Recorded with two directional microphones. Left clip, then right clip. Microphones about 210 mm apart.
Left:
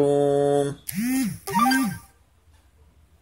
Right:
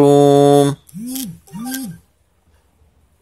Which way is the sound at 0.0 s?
35° right (ahead or behind).